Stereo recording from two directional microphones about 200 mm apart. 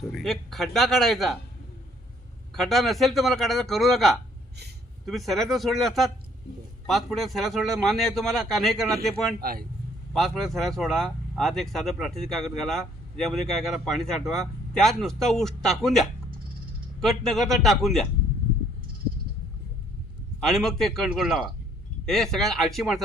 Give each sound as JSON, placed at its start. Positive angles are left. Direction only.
{"t": 0.1, "sound": "speech", "side_deg": 0}
{"t": 2.5, "sound": "speech", "side_deg": 0}
{"t": 9.4, "sound": "speech", "side_deg": -50}
{"t": 10.1, "sound": "speech", "side_deg": 0}
{"t": 20.4, "sound": "speech", "side_deg": 0}